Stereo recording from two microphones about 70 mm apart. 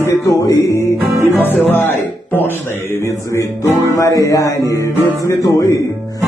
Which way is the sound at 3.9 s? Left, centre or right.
Left.